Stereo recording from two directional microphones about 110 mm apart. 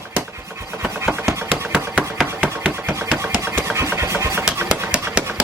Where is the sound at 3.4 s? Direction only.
25° right (ahead or behind).